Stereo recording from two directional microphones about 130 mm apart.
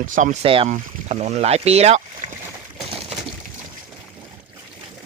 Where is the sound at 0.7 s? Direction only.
65° right (ahead or behind).